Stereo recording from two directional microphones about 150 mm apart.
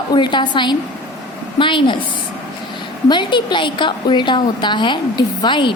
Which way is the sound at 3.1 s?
30° left (ahead or behind).